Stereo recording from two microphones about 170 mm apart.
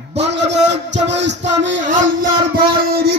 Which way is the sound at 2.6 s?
65° right (ahead or behind).